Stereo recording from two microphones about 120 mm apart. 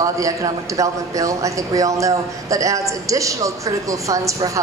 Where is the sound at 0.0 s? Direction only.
30° right (ahead or behind).